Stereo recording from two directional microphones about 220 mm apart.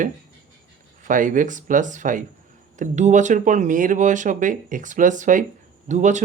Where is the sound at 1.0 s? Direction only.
35° right (ahead or behind).